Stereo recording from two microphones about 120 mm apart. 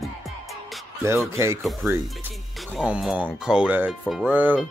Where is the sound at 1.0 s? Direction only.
20° right (ahead or behind).